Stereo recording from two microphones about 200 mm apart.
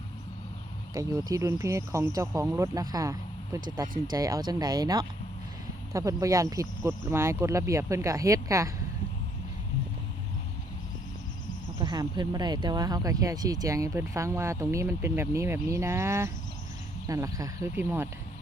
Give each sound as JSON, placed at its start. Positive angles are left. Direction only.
{"t": 0.9, "sound": "speech", "side_deg": -15}
{"t": 11.8, "sound": "speech", "side_deg": -20}